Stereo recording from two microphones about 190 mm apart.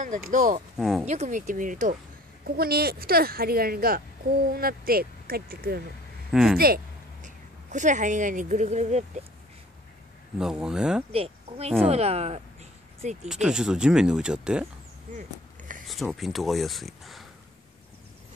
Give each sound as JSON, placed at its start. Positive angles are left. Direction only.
{"t": 0.0, "sound": "speech", "side_deg": -45}
{"t": 0.7, "sound": "speech", "side_deg": 0}
{"t": 1.0, "sound": "speech", "side_deg": -35}
{"t": 2.4, "sound": "speech", "side_deg": -55}
{"t": 6.3, "sound": "speech", "side_deg": -5}
{"t": 6.6, "sound": "speech", "side_deg": -45}
{"t": 10.4, "sound": "speech", "side_deg": -5}
{"t": 11.1, "sound": "speech", "side_deg": -30}
{"t": 13.3, "sound": "speech", "side_deg": -5}
{"t": 15.9, "sound": "speech", "side_deg": 0}